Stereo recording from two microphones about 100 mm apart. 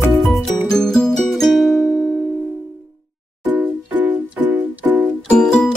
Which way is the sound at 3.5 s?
15° right (ahead or behind).